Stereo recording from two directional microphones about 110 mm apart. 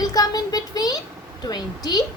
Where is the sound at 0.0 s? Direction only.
35° left (ahead or behind).